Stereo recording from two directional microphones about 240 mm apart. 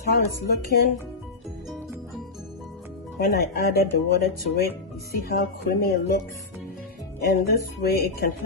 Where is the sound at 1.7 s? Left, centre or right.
Centre.